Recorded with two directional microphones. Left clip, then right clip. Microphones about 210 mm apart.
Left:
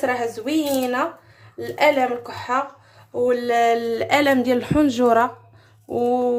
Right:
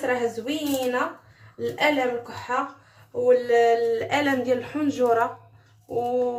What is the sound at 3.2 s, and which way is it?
Speech, 55° left (ahead or behind).